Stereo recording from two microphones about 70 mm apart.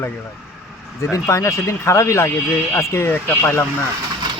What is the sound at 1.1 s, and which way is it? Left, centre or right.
Speech, left.